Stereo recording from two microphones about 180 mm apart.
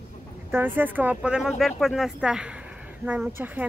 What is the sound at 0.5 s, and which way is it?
Speech, 10° right (ahead or behind).